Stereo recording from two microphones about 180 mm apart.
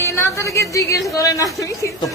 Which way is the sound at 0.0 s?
15° left (ahead or behind).